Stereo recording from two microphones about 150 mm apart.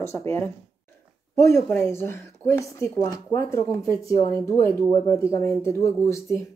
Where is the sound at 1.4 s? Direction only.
20° left (ahead or behind).